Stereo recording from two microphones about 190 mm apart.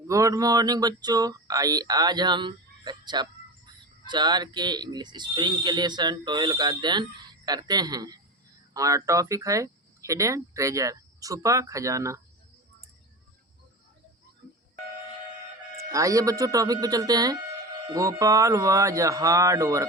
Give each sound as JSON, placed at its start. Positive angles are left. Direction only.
{"t": 0.1, "sound": "speech", "side_deg": -15}
{"t": 15.9, "sound": "speech", "side_deg": -15}